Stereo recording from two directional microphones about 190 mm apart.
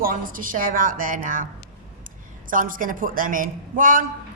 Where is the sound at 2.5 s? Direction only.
45° right (ahead or behind).